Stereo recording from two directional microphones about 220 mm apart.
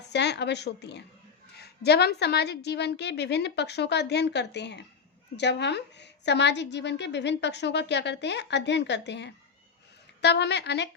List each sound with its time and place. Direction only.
0.1 s a woman's voice: 50° left (ahead or behind)